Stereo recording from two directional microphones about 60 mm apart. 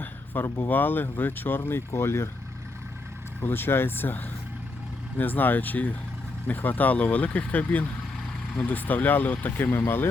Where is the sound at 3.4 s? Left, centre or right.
Left.